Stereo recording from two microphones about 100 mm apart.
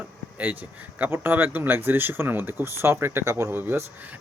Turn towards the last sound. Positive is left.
turn(degrees=-25)  # may be behind; listen again after turning